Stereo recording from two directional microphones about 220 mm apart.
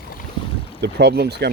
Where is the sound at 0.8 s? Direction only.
50° right (ahead or behind).